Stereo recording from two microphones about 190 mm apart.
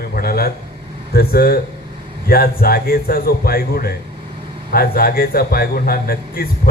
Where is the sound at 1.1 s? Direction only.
55° left (ahead or behind).